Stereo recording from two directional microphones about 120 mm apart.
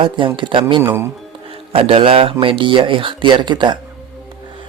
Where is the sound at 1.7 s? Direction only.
50° right (ahead or behind).